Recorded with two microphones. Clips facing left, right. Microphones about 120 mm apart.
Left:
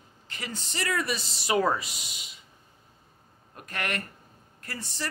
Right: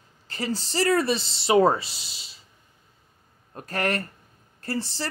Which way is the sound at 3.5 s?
35° right (ahead or behind).